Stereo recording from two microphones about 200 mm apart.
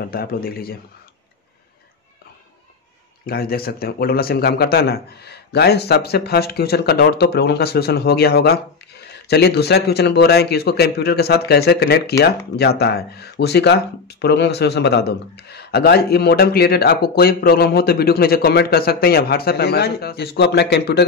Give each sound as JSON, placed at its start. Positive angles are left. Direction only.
{"t": 0.0, "sound": "a man's voice", "side_deg": 50}
{"t": 3.3, "sound": "a man's voice", "side_deg": 50}